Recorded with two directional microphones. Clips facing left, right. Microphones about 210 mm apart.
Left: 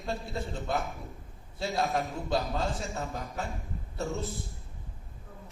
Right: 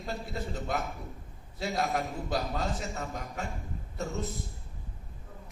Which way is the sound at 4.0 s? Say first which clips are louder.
Left 1 dB; 30° left (ahead or behind).